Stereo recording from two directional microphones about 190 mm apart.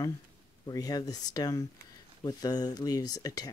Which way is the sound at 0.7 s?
20° left (ahead or behind).